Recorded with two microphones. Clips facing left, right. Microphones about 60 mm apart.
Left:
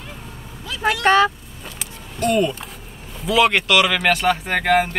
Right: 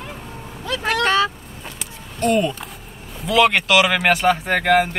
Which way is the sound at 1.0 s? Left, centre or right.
Left.